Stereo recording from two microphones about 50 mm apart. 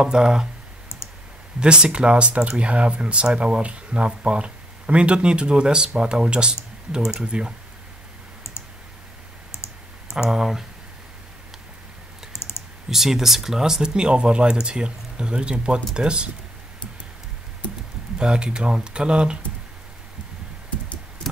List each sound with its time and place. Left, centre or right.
0.0 s speech: centre
1.6 s speech: centre
10.0 s speech: centre
12.4 s computer keyboard: left
12.9 s speech: centre
18.1 s speech: centre